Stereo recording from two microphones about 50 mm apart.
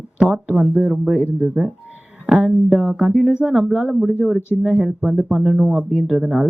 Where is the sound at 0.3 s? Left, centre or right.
Centre.